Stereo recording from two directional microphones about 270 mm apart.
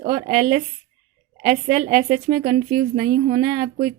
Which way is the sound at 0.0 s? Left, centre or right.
Right.